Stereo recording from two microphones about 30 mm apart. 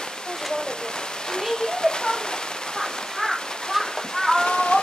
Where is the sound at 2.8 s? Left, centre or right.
Centre.